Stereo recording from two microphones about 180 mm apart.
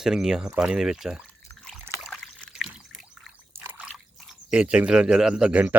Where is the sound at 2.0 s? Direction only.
Centre (ahead or behind).